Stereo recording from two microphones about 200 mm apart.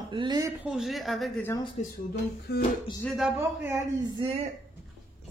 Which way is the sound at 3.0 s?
Centre (ahead or behind).